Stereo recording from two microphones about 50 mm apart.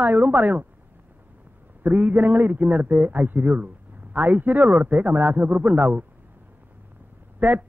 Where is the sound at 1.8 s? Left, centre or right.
Right.